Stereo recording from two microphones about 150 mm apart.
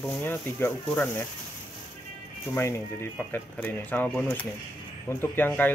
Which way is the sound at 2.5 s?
15° left (ahead or behind).